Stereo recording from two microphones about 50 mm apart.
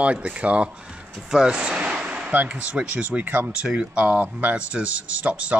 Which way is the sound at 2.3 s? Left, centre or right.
Right.